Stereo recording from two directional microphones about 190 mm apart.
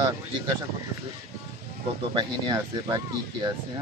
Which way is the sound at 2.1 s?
20° right (ahead or behind).